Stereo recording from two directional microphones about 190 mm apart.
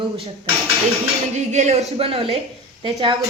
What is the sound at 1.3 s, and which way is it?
Dishes, 40° right (ahead or behind).